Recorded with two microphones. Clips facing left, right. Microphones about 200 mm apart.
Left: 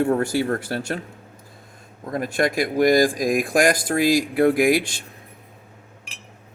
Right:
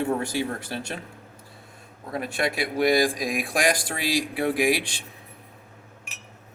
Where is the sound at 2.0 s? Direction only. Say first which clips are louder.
Left 5 dB; 45° left (ahead or behind).